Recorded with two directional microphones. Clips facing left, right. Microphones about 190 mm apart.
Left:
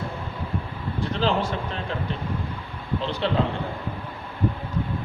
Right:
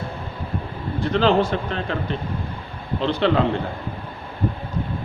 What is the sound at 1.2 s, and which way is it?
Speech, 70° right (ahead or behind).